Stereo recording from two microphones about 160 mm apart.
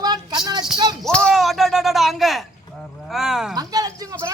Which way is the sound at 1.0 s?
5° left (ahead or behind).